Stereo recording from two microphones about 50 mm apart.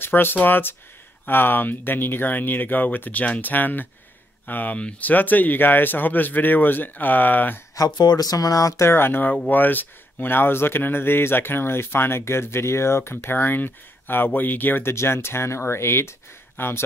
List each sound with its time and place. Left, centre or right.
0.0 s speech: left
4.7 s speech: left
5.1 s speech: left
8.6 s speech: left
8.9 s speech: left
13.1 s speech: left
14.8 s speech: left